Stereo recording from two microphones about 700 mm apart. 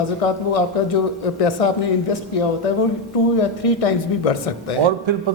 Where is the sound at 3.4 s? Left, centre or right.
Left.